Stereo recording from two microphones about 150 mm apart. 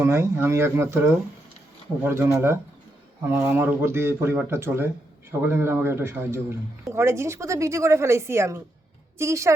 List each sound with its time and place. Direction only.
0.0 s a woman's voice: 15° right (ahead or behind)